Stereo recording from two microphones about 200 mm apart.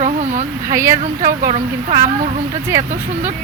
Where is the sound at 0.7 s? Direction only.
15° right (ahead or behind).